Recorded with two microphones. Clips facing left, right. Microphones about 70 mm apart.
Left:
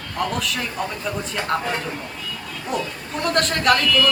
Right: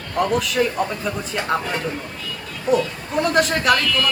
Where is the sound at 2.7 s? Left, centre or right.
Centre.